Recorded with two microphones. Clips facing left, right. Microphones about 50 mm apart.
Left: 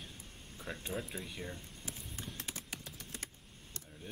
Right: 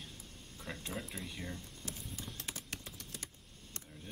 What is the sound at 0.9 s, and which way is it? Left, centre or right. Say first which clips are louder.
Speech: left 3 dB; centre.